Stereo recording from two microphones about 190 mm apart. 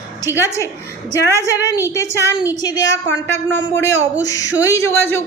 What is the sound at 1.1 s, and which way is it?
A woman's voice, 15° left (ahead or behind).